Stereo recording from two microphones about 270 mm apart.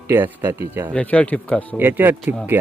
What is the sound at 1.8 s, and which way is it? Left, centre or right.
Speech, centre.